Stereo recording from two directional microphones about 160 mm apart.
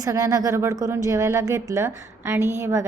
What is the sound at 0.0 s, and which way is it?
A woman's voice, 20° right (ahead or behind).